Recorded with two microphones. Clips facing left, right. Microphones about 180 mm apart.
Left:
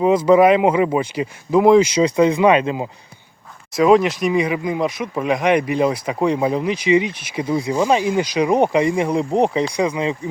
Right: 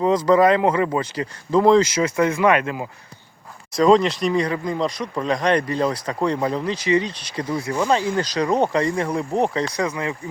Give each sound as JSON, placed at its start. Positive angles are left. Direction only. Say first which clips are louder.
{"t": 0.3, "sound": "speech", "louder": "left 3 dB", "side_deg": 10}
{"t": 3.8, "sound": "speech", "louder": "left 2 dB", "side_deg": 5}